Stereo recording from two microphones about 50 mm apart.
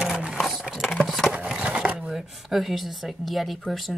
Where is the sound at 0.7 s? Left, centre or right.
Centre.